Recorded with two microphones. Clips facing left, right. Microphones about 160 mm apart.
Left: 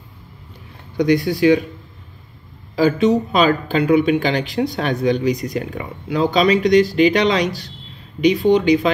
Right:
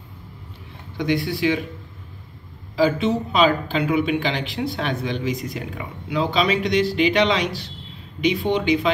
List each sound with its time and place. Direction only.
0.9 s speech: 40° left (ahead or behind)
2.7 s speech: 45° left (ahead or behind)